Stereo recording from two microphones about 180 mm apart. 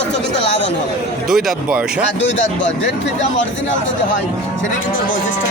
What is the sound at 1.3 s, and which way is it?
Speech, centre (ahead or behind).